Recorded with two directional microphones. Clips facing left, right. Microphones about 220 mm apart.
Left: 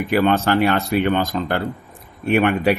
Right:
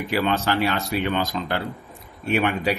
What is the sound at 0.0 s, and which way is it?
A man's voice, 55° left (ahead or behind).